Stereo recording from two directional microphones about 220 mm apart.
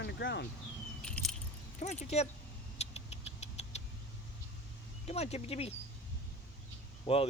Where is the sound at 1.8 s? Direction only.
30° left (ahead or behind).